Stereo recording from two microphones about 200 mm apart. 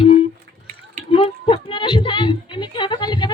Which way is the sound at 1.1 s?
25° left (ahead or behind).